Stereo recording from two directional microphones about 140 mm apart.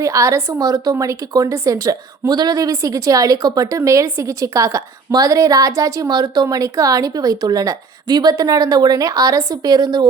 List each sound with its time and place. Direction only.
0.0 s a woman's voice: 20° right (ahead or behind)